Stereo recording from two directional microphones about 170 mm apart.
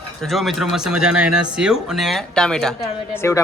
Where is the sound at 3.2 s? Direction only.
15° left (ahead or behind).